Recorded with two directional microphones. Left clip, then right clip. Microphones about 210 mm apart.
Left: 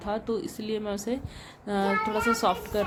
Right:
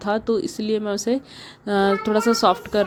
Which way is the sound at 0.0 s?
30° right (ahead or behind).